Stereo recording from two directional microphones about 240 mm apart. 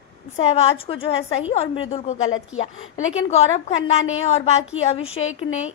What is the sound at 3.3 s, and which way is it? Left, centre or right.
A woman's voice, left.